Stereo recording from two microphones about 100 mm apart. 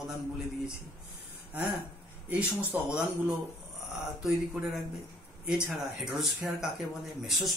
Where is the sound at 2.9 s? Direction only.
5° right (ahead or behind).